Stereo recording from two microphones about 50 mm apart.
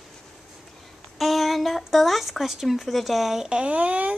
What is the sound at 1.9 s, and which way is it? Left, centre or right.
Speech, centre.